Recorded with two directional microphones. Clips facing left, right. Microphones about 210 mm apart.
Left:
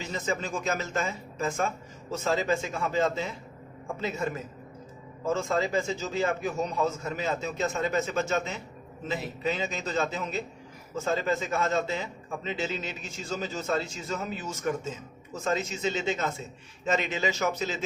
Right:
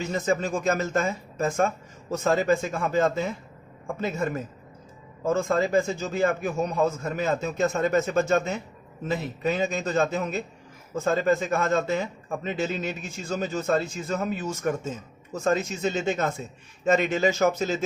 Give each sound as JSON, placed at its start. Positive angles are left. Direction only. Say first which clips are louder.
{"t": 0.0, "sound": "a man's voice", "louder": "right 6 dB", "side_deg": -50}
{"t": 5.3, "sound": "a man's voice", "louder": "right 4 dB", "side_deg": -50}